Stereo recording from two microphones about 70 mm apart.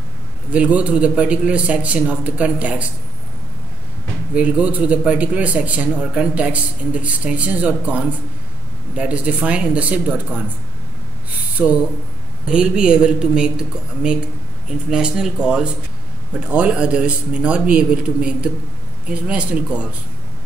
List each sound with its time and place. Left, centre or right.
0.5 s speech: centre
4.3 s speech: centre
11.5 s a man's voice: right